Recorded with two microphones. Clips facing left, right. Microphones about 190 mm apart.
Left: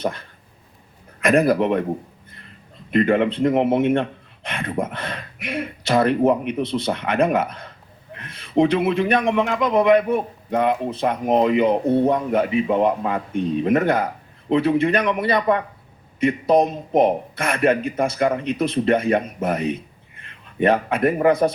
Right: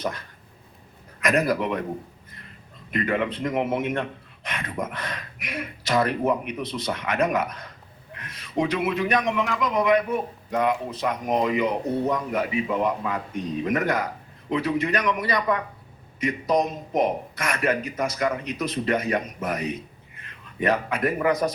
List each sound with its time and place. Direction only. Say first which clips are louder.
0.0 s speech: left 4 dB; 30° left (ahead or behind)
2.9 s speech: left 7 dB; 25° left (ahead or behind)